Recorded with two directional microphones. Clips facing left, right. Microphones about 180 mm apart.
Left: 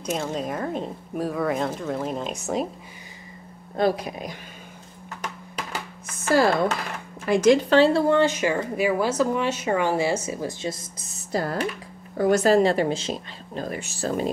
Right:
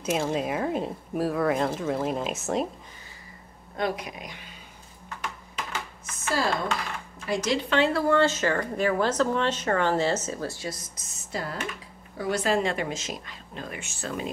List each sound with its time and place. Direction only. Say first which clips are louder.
0.0 s speech: right 1 dB; 5° right (ahead or behind)
3.7 s speech: left 6 dB; 35° left (ahead or behind)
5.2 s a sound: left 2 dB; 40° left (ahead or behind)
7.2 s speech: left 9 dB; 50° left (ahead or behind)
7.7 s speech: left 5 dB; 30° left (ahead or behind)
11.1 s speech: left 7 dB; 35° left (ahead or behind)